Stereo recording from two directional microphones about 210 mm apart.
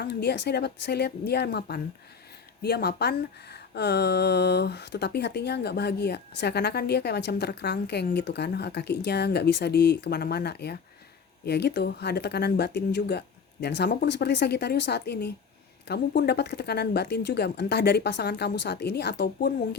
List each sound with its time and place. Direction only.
0.0 s speech: 50° left (ahead or behind)